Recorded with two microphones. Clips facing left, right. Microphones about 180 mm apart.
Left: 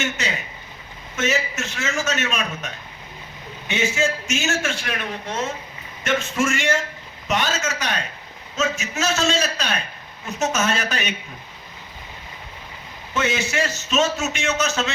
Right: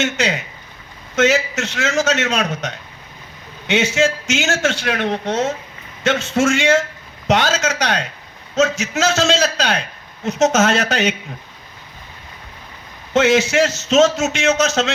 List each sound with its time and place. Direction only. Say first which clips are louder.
0.0 s a man's voice: right 7 dB; 80° right
13.1 s a man's voice: right 9 dB; 85° right